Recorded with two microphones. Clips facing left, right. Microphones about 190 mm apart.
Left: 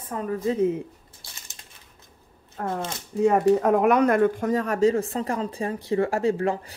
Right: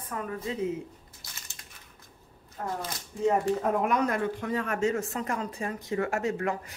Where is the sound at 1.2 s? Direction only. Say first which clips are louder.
Left 2 dB; 30° left (ahead or behind).